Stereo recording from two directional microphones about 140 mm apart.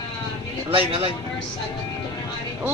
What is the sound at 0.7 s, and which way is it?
Speech, 40° right (ahead or behind).